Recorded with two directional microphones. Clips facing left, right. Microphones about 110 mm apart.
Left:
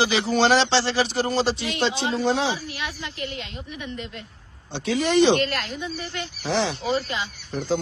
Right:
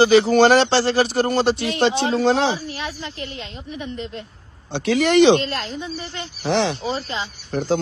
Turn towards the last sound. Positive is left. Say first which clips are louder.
# right 4 dB
turn(degrees=-60)  # may be behind; listen again after turning